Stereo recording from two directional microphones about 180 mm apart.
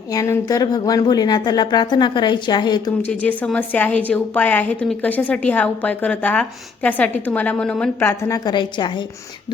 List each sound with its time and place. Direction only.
0.1 s speech: 20° left (ahead or behind)
3.1 s a woman's voice: 5° left (ahead or behind); by 9.0 s 25° left (ahead or behind)